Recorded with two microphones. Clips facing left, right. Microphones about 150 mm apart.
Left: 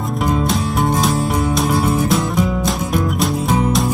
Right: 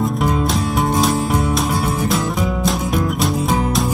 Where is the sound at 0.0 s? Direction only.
Centre (ahead or behind).